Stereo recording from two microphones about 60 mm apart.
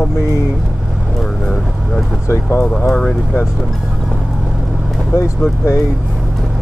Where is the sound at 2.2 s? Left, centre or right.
Left.